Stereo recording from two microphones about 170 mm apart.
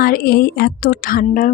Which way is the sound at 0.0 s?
60° left (ahead or behind).